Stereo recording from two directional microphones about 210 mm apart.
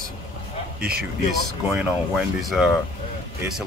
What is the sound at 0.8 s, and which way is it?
Speech, 45° right (ahead or behind).